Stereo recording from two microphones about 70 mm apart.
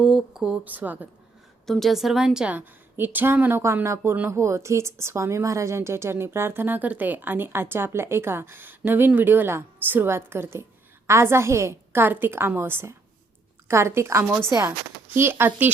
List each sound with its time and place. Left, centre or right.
0.0 s a sound: centre
0.6 s speech: right
1.6 s a woman's voice: centre
2.9 s speech: right
3.8 s a woman's voice: right